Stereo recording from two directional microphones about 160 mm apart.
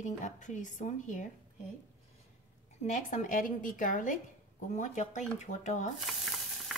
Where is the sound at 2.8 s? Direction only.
50° left (ahead or behind).